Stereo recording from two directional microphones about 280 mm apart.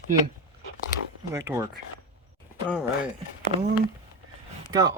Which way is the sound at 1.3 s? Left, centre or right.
Centre.